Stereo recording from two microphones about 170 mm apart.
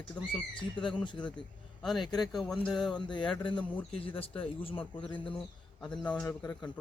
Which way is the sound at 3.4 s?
30° left (ahead or behind).